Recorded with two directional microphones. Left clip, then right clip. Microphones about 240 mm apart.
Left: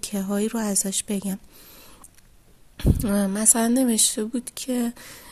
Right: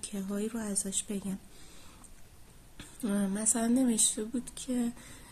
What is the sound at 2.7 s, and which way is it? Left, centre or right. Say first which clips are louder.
Speech: left 11 dB; left.